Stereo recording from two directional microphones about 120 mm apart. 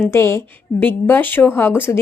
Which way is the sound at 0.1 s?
20° left (ahead or behind).